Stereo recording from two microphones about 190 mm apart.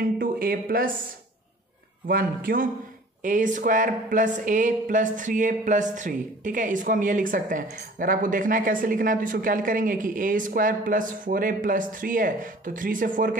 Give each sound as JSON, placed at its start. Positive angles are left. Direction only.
{"t": 0.0, "sound": "speech", "side_deg": -50}
{"t": 2.0, "sound": "speech", "side_deg": -50}